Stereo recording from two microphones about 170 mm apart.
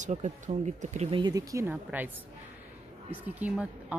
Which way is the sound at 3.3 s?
10° right (ahead or behind).